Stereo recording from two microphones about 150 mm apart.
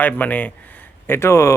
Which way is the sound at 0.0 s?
10° left (ahead or behind).